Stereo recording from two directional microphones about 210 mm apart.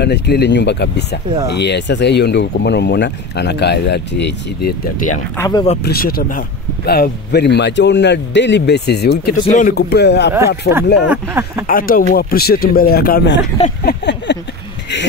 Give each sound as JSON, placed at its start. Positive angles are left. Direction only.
{"t": 0.0, "sound": "speech", "side_deg": 50}
{"t": 5.4, "sound": "speech", "side_deg": 20}
{"t": 5.9, "sound": "speech", "side_deg": 45}
{"t": 9.5, "sound": "speech", "side_deg": 35}
{"t": 9.8, "sound": "speech", "side_deg": 50}
{"t": 11.1, "sound": "speech", "side_deg": -10}
{"t": 11.6, "sound": "speech", "side_deg": 40}
{"t": 13.8, "sound": "a sound", "side_deg": 55}